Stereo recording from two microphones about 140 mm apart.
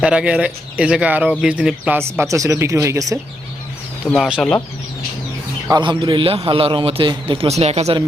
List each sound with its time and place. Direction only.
0.0 s speech: 10° right (ahead or behind)
4.1 s speech: centre (ahead or behind)
4.4 s speech: 10° left (ahead or behind)
5.6 s a man's voice: 30° right (ahead or behind); by 7.9 s 50° right (ahead or behind)